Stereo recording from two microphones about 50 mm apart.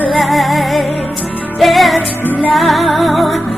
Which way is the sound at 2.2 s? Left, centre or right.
Left.